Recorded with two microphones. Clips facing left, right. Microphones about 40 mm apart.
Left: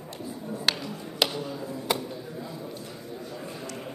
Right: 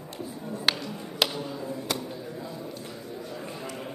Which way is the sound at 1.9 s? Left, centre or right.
Centre.